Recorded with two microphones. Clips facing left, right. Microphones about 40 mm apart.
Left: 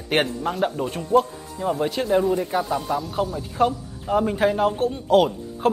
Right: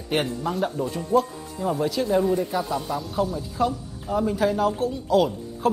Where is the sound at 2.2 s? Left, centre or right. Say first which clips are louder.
Left 1 dB; centre.